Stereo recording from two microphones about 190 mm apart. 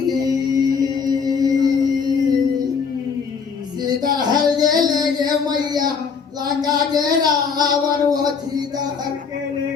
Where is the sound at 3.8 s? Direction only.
20° right (ahead or behind).